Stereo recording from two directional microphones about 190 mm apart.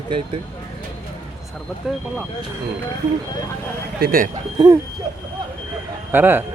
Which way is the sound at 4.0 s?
50° right (ahead or behind).